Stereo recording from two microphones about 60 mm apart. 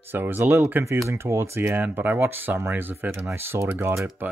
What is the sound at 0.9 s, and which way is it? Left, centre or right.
Speech, right.